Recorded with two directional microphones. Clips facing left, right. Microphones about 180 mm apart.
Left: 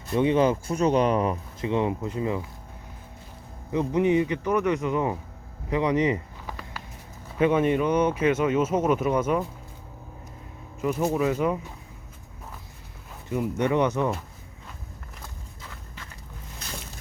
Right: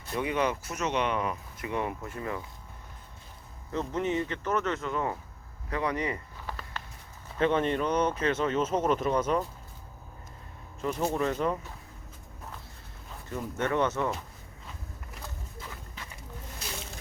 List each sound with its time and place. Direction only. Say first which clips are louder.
0.1 s speech: left 8 dB; 25° left (ahead or behind)
3.7 s speech: left 8 dB; 15° left (ahead or behind)
5.7 s a sound: left 8 dB; 20° left (ahead or behind)
7.3 s speech: left 5 dB; 10° left (ahead or behind)
10.8 s speech: left 4 dB; 10° left (ahead or behind)
13.2 s speech: left 6 dB; 15° left (ahead or behind)